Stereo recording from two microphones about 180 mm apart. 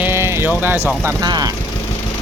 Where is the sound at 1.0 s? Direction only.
20° right (ahead or behind).